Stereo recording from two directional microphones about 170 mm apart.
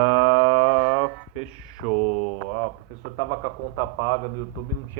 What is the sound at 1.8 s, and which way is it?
Mantra, 35° left (ahead or behind).